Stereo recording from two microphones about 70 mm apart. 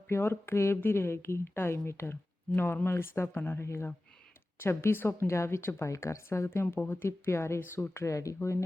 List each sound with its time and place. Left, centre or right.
0.1 s speech: left
6.7 s speech: left